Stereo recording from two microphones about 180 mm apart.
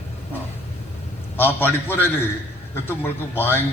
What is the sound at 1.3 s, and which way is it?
A man's voice, 10° left (ahead or behind).